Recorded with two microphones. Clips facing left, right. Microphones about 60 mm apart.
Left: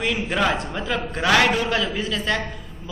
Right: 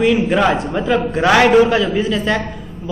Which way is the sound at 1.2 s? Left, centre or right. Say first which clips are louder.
Right 8 dB; centre.